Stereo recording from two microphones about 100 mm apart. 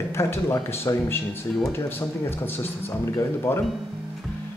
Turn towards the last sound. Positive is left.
turn(degrees=25)  # may be behind; listen again after turning